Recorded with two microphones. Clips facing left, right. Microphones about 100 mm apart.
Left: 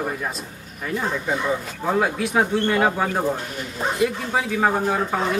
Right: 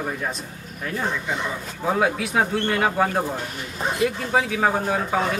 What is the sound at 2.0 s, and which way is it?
Speech, centre (ahead or behind).